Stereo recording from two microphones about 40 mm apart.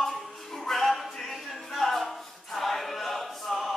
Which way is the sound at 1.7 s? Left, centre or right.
Centre.